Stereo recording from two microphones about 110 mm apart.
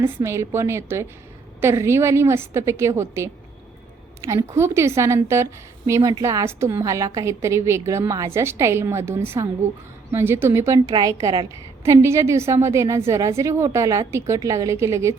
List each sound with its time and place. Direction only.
0.0 s a woman's voice: 25° right (ahead or behind)
10.8 s a woman's voice: 35° right (ahead or behind)
11.9 s a woman's voice: 25° right (ahead or behind)